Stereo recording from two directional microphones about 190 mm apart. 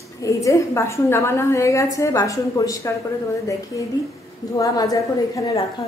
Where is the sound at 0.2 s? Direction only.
15° left (ahead or behind).